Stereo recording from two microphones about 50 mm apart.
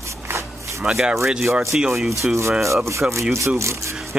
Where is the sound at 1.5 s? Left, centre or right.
Right.